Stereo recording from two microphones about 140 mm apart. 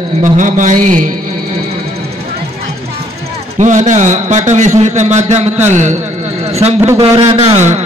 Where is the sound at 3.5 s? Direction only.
60° right (ahead or behind).